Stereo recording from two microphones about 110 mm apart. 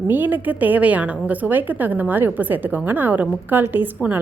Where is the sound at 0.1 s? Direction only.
15° right (ahead or behind).